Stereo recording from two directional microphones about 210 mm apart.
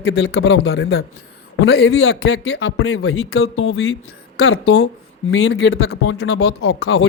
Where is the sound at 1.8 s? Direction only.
70° left (ahead or behind).